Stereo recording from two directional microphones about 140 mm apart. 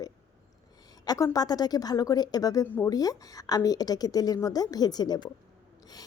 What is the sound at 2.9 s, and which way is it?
Speech, 25° left (ahead or behind).